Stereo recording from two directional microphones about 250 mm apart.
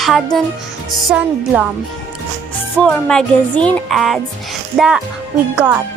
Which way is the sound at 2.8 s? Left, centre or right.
Centre.